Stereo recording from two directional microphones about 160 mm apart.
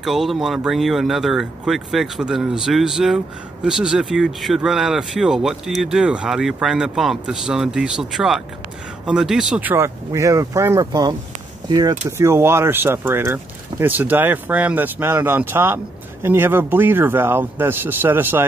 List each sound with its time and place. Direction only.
0.0 s speech: centre (ahead or behind)